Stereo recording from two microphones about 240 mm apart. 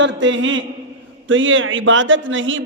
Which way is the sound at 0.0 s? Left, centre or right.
Right.